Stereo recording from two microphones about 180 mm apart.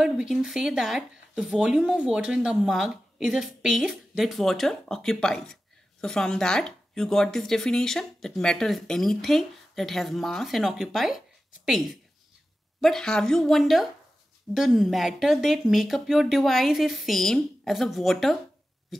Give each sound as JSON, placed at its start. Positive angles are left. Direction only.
{"t": 0.0, "sound": "speech", "side_deg": -5}